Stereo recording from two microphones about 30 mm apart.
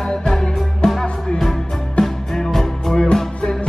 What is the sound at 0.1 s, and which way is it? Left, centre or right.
Music, left.